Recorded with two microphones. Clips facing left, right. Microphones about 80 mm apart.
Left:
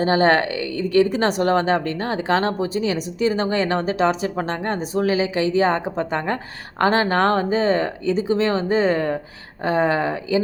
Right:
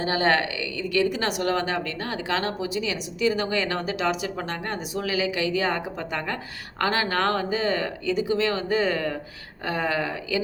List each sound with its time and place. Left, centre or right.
0.0 s speech: left